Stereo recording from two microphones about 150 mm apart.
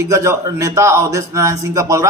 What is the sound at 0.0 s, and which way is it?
A man's voice, 20° right (ahead or behind).